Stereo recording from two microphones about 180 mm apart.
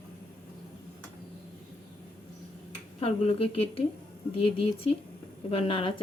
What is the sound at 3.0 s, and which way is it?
A woman's voice, 30° left (ahead or behind).